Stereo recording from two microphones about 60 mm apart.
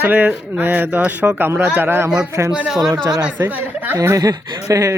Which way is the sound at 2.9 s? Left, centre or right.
Right.